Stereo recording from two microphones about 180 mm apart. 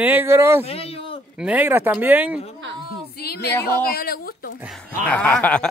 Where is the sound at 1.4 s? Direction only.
10° right (ahead or behind).